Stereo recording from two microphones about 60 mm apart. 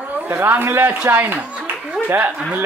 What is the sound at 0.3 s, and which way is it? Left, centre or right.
Speech, right.